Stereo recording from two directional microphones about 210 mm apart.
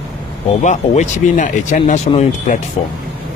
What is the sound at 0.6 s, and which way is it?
Speech, 35° left (ahead or behind).